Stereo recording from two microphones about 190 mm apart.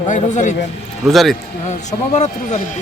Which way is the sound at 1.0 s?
Centre (ahead or behind).